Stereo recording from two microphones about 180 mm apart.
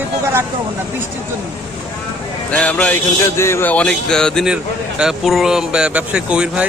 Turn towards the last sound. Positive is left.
turn(degrees=-5)  # may be behind; listen again after turning